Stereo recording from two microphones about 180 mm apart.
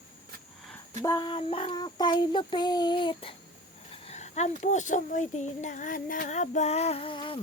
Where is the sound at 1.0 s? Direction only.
25° left (ahead or behind).